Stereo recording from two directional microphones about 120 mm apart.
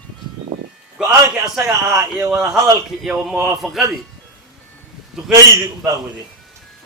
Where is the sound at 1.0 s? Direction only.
5° right (ahead or behind).